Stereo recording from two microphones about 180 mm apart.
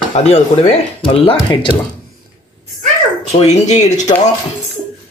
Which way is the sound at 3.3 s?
40° left (ahead or behind).